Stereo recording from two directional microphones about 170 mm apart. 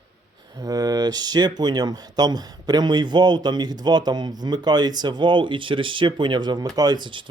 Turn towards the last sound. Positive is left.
turn(degrees=-30)  # may be behind; listen again after turning